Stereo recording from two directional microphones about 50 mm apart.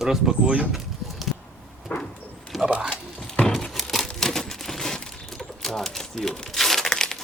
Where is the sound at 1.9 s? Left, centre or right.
Left.